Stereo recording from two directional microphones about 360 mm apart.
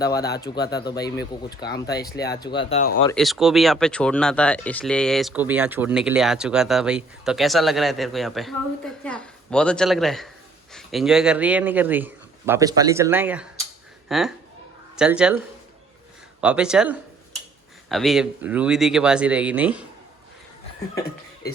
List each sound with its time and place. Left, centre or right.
0.3 s speech: centre
1.6 s speech: left
2.4 s speech: centre
3.2 s speech: centre
16.4 s speech: centre